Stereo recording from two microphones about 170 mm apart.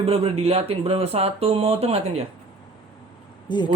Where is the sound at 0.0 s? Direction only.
35° right (ahead or behind).